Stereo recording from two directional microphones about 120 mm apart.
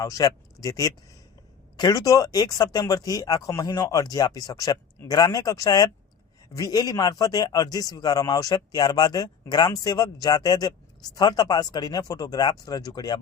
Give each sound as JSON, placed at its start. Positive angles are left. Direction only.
{"t": 0.0, "sound": "a man's voice", "side_deg": 30}